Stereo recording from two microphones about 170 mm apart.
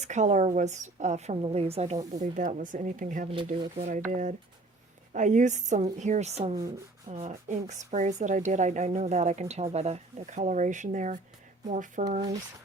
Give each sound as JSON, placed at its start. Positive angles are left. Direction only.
{"t": 0.0, "sound": "speech", "side_deg": -45}
{"t": 3.2, "sound": "speech", "side_deg": -30}
{"t": 3.8, "sound": "speech", "side_deg": -45}